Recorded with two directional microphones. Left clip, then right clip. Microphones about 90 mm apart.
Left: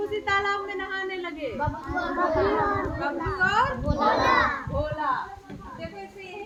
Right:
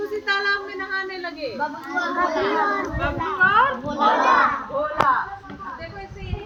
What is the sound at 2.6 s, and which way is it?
Speech, 40° right (ahead or behind).